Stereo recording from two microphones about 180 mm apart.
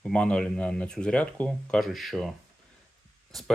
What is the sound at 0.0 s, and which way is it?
Speech, 5° left (ahead or behind).